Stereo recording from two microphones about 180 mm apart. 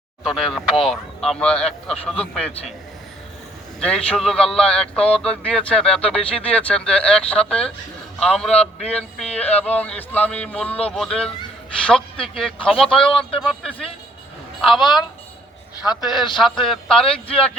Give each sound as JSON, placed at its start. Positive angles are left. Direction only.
{"t": 0.3, "sound": "speech", "side_deg": 0}
{"t": 3.8, "sound": "a man's voice", "side_deg": 5}
{"t": 12.1, "sound": "speech", "side_deg": 30}
{"t": 12.4, "sound": "speech", "side_deg": 5}
{"t": 13.1, "sound": "a man's voice", "side_deg": 30}
{"t": 13.4, "sound": "speech", "side_deg": 0}
{"t": 15.9, "sound": "speech", "side_deg": 0}
{"t": 17.1, "sound": "a man's voice", "side_deg": 30}